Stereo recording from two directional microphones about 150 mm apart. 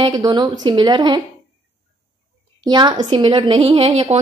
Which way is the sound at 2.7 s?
30° right (ahead or behind).